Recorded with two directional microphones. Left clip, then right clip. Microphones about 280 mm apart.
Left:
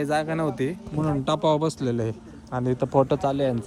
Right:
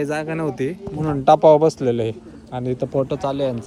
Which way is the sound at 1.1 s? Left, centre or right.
Centre.